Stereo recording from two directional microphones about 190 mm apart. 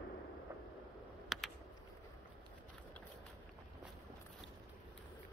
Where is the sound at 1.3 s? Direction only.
Centre (ahead or behind).